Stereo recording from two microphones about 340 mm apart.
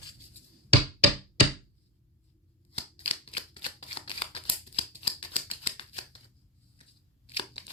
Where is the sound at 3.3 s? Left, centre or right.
Centre.